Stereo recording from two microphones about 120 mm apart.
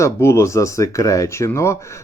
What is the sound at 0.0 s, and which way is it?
Speech, 20° left (ahead or behind).